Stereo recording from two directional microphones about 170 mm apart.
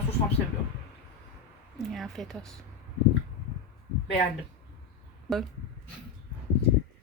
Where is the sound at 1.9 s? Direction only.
Centre (ahead or behind).